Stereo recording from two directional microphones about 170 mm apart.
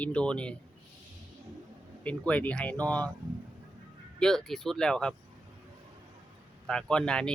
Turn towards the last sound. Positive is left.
turn(degrees=5)  # may be behind; listen again after turning